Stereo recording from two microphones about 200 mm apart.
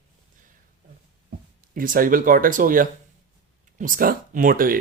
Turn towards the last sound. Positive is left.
turn(degrees=-45)  # may be behind; listen again after turning